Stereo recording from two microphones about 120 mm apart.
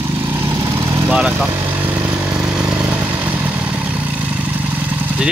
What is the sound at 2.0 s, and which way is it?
Vehicle, 10° right (ahead or behind).